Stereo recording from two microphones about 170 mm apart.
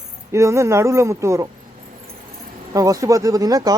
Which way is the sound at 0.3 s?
15° right (ahead or behind).